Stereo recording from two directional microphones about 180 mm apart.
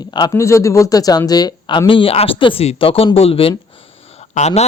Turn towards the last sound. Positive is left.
turn(degrees=40)  # may be behind; listen again after turning